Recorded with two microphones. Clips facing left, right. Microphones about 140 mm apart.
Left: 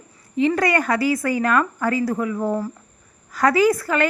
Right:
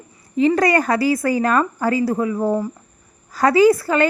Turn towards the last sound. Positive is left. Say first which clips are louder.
# right 4 dB
turn(degrees=-30)  # may be behind; listen again after turning